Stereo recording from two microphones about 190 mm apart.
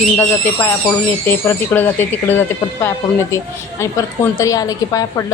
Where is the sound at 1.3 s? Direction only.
10° left (ahead or behind).